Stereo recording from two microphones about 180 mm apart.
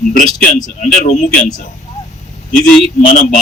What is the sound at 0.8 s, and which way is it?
Speech, 40° left (ahead or behind).